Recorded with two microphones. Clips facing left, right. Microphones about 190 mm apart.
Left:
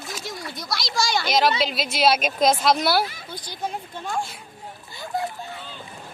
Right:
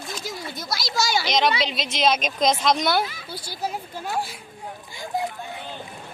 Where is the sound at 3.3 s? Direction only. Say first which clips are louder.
Right 1 dB; 10° right (ahead or behind).